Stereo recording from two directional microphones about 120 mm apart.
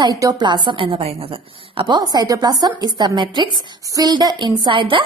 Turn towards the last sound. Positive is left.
turn(degrees=-45)  # may be behind; listen again after turning